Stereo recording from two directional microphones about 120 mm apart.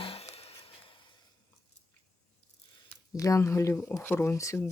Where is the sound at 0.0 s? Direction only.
50° left (ahead or behind).